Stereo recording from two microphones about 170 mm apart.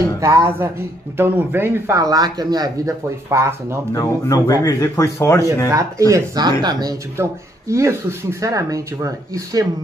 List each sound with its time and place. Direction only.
0.2 s speech: 15° right (ahead or behind)
3.9 s speech: 20° left (ahead or behind)
5.7 s speech: 20° right (ahead or behind)